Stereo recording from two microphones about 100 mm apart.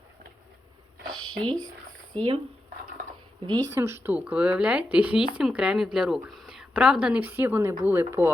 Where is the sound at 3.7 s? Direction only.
25° right (ahead or behind).